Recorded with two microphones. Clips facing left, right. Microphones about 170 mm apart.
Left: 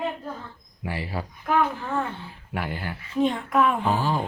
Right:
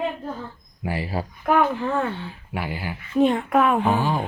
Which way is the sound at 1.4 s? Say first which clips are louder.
Right 4 dB; 75° right (ahead or behind).